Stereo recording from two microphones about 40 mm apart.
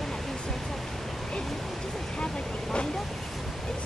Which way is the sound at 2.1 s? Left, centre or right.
Left.